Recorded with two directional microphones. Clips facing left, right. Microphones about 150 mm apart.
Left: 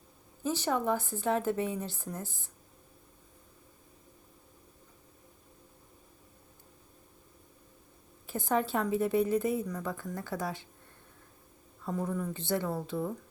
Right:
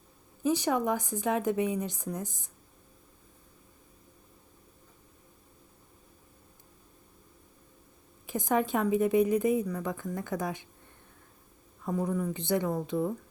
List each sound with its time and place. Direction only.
0.4 s a woman's voice: 15° right (ahead or behind)
8.3 s a woman's voice: 15° right (ahead or behind)
11.9 s a woman's voice: 15° right (ahead or behind)